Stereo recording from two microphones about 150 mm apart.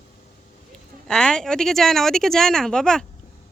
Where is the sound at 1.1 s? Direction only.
5° left (ahead or behind).